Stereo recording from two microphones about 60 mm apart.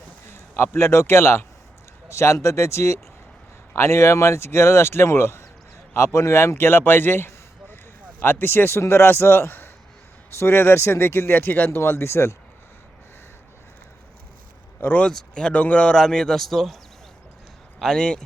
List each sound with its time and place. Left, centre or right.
0.3 s a man's voice: left
11.8 s speech: left
14.8 s speech: left
15.0 s speech: centre
17.7 s speech: centre